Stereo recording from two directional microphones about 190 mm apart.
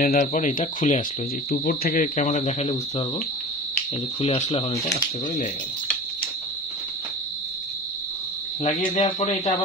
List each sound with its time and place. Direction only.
0.0 s speech: 55° left (ahead or behind)
0.3 s speech: 40° left (ahead or behind)
4.2 s speech: 30° left (ahead or behind)
8.6 s speech: 35° left (ahead or behind)